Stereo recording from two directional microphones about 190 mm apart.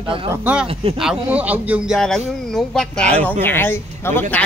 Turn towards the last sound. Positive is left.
turn(degrees=10)  # may be behind; listen again after turning